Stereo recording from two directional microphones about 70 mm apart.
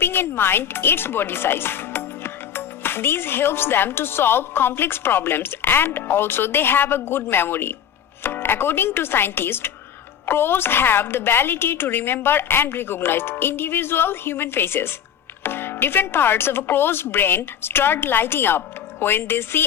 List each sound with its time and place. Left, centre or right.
0.0 s speech: left